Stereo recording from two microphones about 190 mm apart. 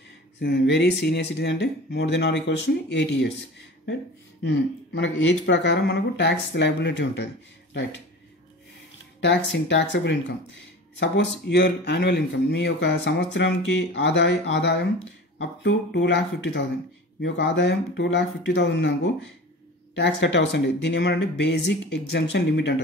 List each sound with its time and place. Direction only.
0.4 s speech: 60° left (ahead or behind)
4.4 s speech: 70° left (ahead or behind)
9.2 s speech: 70° left (ahead or behind)
20.0 s speech: 70° left (ahead or behind)